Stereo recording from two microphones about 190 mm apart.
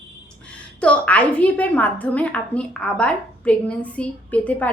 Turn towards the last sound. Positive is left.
turn(degrees=5)  # may be behind; listen again after turning